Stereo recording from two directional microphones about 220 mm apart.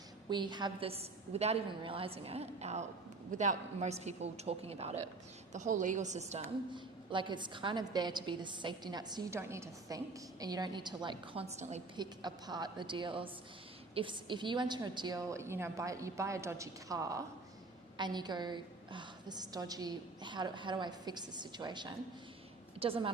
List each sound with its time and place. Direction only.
0.3 s a woman's voice: 20° right (ahead or behind)
11.9 s a woman's voice: 20° right (ahead or behind)